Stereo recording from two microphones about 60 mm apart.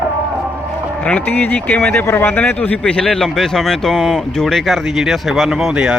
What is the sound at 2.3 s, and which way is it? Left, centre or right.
Speech, left.